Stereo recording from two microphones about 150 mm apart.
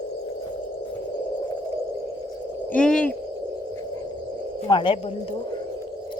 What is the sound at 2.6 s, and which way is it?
Speech, 5° left (ahead or behind).